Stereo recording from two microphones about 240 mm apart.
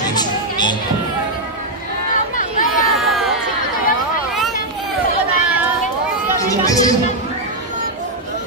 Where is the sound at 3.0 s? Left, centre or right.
Centre.